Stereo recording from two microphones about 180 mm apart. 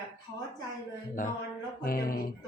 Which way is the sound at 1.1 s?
50° left (ahead or behind).